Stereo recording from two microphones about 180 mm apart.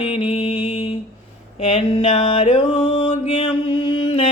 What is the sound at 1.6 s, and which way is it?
Music, 35° left (ahead or behind).